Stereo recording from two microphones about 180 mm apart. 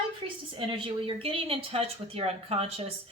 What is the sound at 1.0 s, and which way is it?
Speech, 30° right (ahead or behind).